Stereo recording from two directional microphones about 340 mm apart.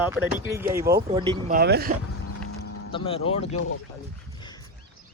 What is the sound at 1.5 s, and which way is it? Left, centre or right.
Speech, right.